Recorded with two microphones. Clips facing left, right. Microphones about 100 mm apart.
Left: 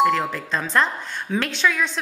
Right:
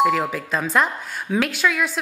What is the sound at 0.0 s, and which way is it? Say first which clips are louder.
A woman's voice: even; 5° right (ahead or behind).